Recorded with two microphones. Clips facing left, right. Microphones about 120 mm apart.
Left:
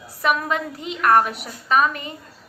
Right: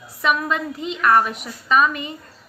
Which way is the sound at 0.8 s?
50° left (ahead or behind).